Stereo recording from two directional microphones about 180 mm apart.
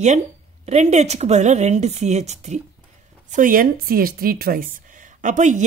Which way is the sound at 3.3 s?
50° right (ahead or behind).